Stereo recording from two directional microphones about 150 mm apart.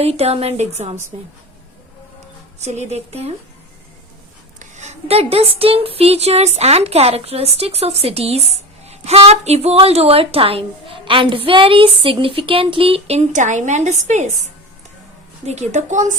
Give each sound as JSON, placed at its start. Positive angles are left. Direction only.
{"t": 0.0, "sound": "speech", "side_deg": -45}
{"t": 2.6, "sound": "speech", "side_deg": -45}
{"t": 4.6, "sound": "a woman's voice", "side_deg": -50}